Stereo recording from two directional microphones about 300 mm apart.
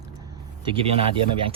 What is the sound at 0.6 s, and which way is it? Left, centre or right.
Speech, centre.